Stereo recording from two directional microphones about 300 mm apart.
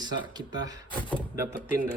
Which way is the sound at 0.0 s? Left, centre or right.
Centre.